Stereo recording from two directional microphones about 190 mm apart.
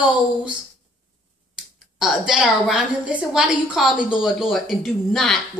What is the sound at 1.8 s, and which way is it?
A woman's voice, 5° right (ahead or behind).